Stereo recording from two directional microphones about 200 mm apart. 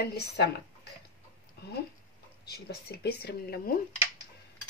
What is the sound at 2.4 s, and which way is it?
Speech, 50° left (ahead or behind).